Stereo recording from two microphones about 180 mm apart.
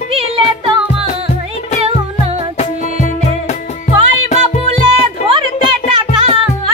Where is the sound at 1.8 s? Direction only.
35° right (ahead or behind).